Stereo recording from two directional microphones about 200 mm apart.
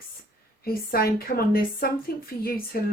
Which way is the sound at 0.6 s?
50° left (ahead or behind).